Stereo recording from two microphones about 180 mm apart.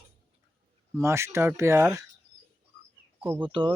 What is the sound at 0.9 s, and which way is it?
Speech, 15° right (ahead or behind).